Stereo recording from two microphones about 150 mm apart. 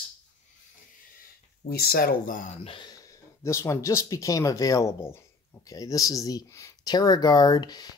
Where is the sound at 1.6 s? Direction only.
90° left; by 2.5 s 65° left (ahead or behind).